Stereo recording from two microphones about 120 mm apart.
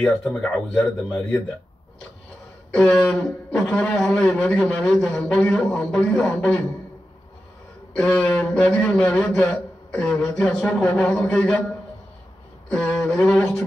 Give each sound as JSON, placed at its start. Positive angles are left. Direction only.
{"t": 0.0, "sound": "speech", "side_deg": 5}
{"t": 0.4, "sound": "speech", "side_deg": 15}
{"t": 2.7, "sound": "speech", "side_deg": 10}
{"t": 3.2, "sound": "a man's voice", "side_deg": 25}
{"t": 3.9, "sound": "speech", "side_deg": 5}
{"t": 7.9, "sound": "speech", "side_deg": 10}
{"t": 12.6, "sound": "a sound", "side_deg": 10}